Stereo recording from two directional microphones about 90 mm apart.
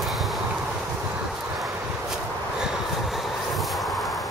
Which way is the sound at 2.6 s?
Centre (ahead or behind).